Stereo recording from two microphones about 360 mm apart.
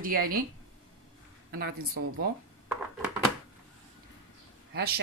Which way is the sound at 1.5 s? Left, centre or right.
Right.